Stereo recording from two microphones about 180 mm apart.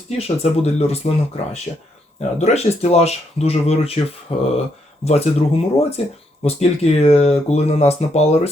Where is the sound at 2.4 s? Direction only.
35° left (ahead or behind).